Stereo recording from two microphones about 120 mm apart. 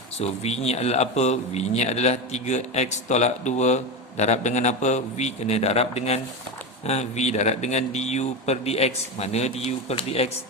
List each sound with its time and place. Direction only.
0.2 s a man's voice: 65° left (ahead or behind)